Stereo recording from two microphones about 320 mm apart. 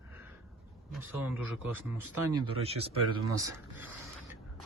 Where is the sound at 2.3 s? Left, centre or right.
Centre.